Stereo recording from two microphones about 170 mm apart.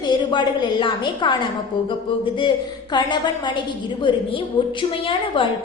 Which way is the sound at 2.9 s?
25° left (ahead or behind).